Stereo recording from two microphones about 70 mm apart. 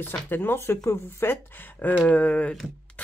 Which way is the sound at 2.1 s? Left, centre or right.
Centre.